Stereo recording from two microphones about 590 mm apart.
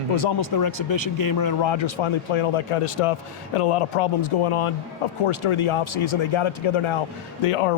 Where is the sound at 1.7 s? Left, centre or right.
Left.